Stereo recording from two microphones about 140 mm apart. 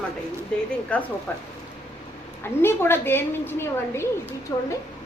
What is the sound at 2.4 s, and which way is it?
A woman's voice, 15° left (ahead or behind).